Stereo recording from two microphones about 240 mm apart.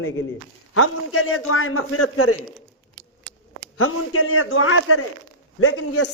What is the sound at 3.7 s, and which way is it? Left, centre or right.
Speech, left.